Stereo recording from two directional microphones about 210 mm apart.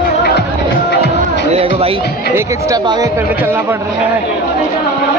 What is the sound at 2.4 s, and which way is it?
Speech, 15° right (ahead or behind).